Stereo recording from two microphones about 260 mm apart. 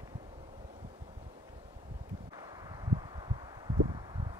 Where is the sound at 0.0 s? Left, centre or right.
Centre.